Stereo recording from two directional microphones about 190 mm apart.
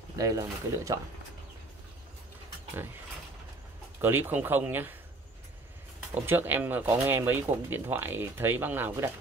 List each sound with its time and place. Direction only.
0.1 s speech: 20° right (ahead or behind)
4.0 s speech: 10° right (ahead or behind)
6.2 s speech: 10° right (ahead or behind)